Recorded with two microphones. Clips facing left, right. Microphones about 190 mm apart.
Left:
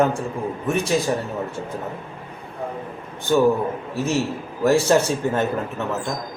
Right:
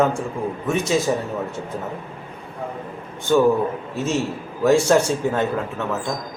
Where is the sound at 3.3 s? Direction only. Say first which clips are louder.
Right 1 dB; 5° left (ahead or behind).